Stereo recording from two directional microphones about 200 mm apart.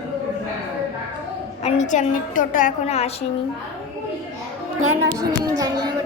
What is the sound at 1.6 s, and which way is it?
A woman's voice, 35° left (ahead or behind).